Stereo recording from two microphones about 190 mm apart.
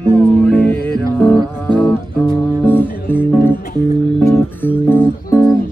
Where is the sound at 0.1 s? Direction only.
5° left (ahead or behind).